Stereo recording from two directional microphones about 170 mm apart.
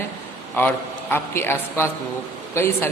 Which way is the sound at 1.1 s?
15° left (ahead or behind).